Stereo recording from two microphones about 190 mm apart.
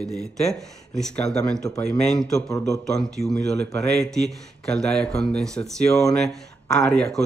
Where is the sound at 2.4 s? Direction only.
20° left (ahead or behind).